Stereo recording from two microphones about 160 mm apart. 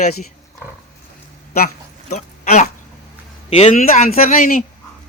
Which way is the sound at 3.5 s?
45° left (ahead or behind).